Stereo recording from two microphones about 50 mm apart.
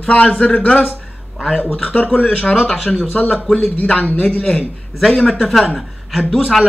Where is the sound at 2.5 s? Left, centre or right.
Centre.